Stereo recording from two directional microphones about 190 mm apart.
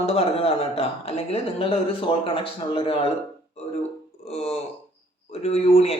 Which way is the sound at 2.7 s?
30° left (ahead or behind).